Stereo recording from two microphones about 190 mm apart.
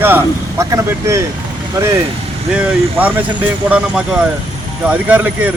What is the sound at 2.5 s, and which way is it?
A man's voice, 10° right (ahead or behind).